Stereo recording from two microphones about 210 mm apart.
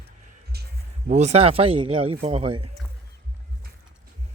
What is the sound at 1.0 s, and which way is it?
Speech, 35° right (ahead or behind).